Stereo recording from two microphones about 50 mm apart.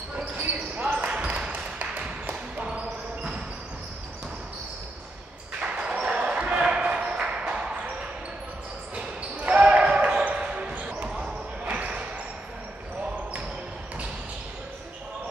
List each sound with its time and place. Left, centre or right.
0.1 s basketball bounce: right
0.7 s basketball bounce: right
5.6 s basketball bounce: right
8.9 s basketball bounce: right